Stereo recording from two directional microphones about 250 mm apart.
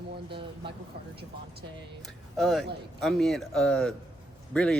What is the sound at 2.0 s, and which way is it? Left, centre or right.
Speech, centre.